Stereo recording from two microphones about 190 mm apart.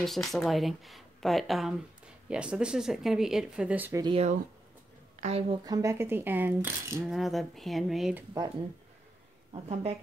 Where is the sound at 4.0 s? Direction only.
25° right (ahead or behind).